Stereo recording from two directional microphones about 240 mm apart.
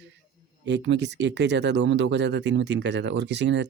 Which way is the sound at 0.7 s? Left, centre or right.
Right.